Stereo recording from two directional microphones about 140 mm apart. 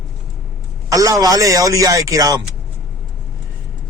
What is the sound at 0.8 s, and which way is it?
A man's voice, 25° right (ahead or behind).